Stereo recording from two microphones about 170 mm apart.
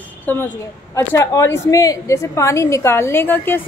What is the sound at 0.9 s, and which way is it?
A woman's voice, 20° left (ahead or behind).